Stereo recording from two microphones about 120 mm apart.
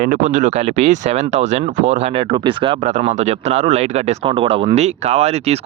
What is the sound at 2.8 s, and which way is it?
Speech, 70° right (ahead or behind).